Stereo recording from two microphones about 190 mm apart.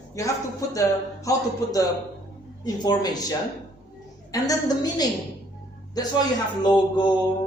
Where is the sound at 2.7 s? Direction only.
20° left (ahead or behind).